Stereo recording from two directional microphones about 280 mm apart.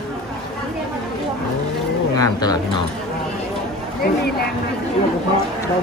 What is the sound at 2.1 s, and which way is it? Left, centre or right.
Speech, centre.